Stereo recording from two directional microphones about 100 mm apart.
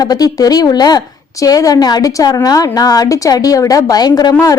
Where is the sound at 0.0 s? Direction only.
40° left (ahead or behind).